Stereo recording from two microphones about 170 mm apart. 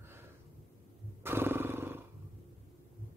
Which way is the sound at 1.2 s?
15° right (ahead or behind).